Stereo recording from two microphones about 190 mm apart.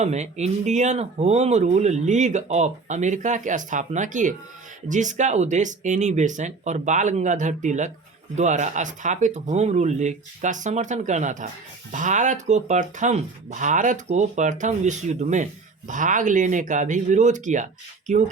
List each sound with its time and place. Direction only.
0.0 s speech: 35° right (ahead or behind)